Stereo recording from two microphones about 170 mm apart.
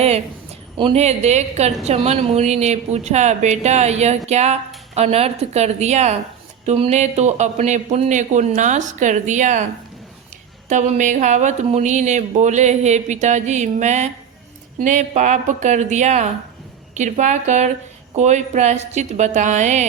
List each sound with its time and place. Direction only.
0.8 s a woman's voice: 35° right (ahead or behind)
10.7 s speech: 45° right (ahead or behind)